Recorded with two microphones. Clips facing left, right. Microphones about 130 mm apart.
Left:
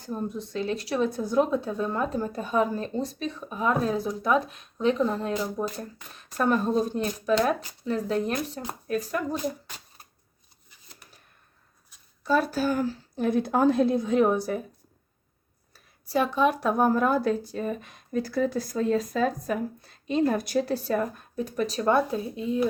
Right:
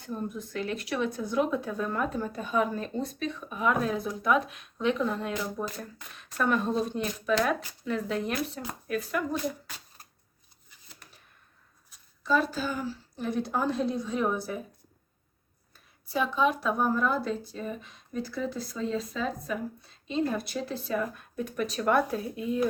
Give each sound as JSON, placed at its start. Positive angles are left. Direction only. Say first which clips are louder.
{"t": 0.0, "sound": "speech", "louder": "left 3 dB", "side_deg": 30}
{"t": 12.2, "sound": "speech", "louder": "left 3 dB", "side_deg": 50}
{"t": 12.8, "sound": "a woman's voice", "louder": "left 7 dB", "side_deg": 75}
{"t": 16.1, "sound": "a woman's voice", "louder": "left 3 dB", "side_deg": 60}